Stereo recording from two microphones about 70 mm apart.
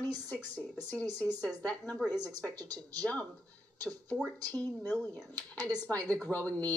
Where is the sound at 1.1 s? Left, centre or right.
Right.